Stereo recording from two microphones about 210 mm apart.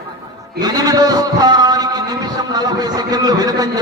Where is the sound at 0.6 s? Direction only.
20° right (ahead or behind).